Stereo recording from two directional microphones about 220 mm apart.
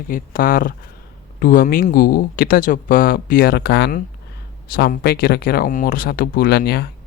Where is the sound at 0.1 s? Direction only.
40° left (ahead or behind).